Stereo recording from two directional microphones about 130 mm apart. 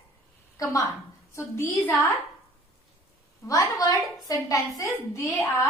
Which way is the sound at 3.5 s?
25° left (ahead or behind).